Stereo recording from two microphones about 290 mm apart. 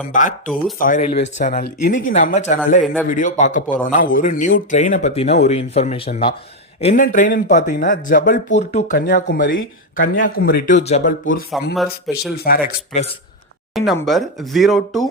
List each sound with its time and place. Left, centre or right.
0.1 s speech: left
2.8 s speech: centre
3.1 s speech: left
11.7 s speech: centre
12.4 s speech: left
13.7 s speech: centre